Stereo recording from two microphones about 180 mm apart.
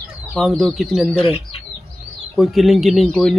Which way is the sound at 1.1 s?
30° left (ahead or behind).